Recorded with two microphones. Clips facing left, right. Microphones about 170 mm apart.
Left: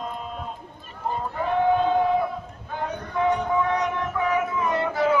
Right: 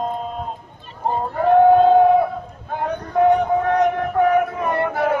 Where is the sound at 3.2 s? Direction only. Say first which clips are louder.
Right 7 dB; 55° right (ahead or behind).